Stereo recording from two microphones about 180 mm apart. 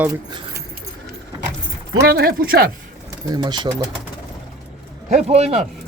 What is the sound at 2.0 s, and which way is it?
Speech, 60° right (ahead or behind).